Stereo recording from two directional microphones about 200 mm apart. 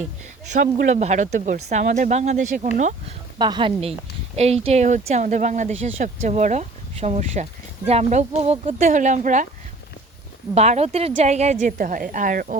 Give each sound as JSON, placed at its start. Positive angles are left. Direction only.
{"t": 0.6, "sound": "speech", "side_deg": -40}
{"t": 3.3, "sound": "a woman's voice", "side_deg": -20}
{"t": 10.5, "sound": "speech", "side_deg": -35}